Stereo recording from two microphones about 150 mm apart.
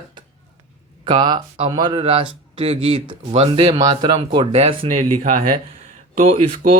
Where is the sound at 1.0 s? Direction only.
30° right (ahead or behind).